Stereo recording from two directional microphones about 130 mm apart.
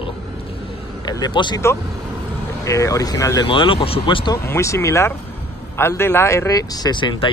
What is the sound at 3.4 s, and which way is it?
Speech, 40° left (ahead or behind).